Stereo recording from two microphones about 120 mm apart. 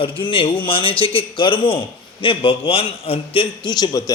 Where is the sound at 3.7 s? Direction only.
35° left (ahead or behind).